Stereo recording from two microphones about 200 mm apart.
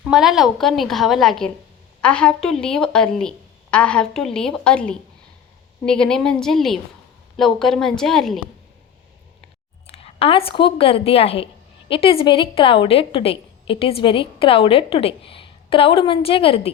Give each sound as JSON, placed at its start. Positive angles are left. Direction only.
{"t": 0.0, "sound": "a woman's voice", "side_deg": 0}
{"t": 9.8, "sound": "a woman's voice", "side_deg": 30}